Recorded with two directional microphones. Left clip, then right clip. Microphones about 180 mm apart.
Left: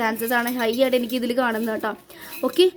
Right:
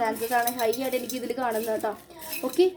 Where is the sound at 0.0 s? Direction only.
65° left (ahead or behind).